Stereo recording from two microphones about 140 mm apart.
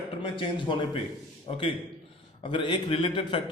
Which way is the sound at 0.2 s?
35° left (ahead or behind).